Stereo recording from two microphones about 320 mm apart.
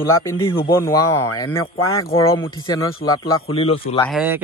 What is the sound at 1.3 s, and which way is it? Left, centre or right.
Speech, centre.